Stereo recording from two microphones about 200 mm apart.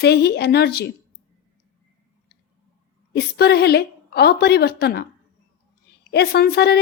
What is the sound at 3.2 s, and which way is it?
A woman's voice, 55° left (ahead or behind).